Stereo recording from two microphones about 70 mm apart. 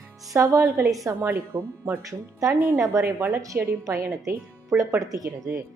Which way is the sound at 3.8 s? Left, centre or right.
Right.